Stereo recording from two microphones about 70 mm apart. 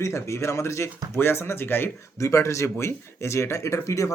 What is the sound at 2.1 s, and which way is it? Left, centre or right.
Speech, left.